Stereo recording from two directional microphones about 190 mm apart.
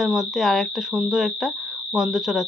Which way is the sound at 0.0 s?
Centre (ahead or behind).